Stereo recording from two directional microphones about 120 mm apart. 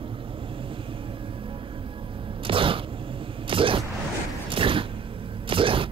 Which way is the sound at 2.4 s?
45° right (ahead or behind).